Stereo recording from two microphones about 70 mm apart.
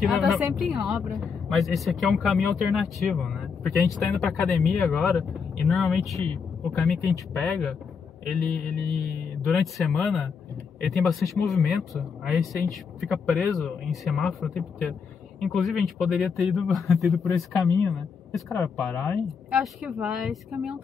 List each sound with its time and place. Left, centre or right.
0.0 s a woman's voice: centre
7.3 s speech: centre
9.5 s a woman's voice: centre